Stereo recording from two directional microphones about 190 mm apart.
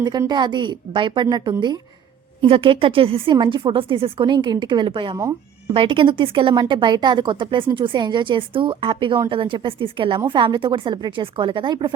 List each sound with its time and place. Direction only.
0.0 s speech: 20° right (ahead or behind)